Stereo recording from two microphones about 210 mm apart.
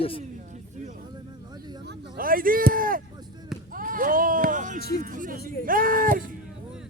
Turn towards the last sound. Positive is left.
turn(degrees=-40)  # may be behind; listen again after turning